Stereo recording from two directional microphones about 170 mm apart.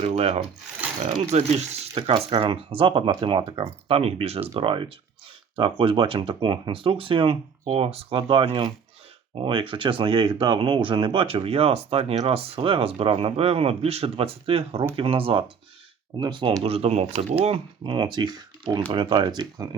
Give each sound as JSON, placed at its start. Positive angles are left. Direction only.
{"t": 0.0, "sound": "speech", "side_deg": -35}